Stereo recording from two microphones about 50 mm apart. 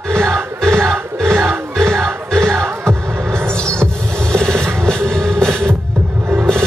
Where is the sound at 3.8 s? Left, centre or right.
Centre.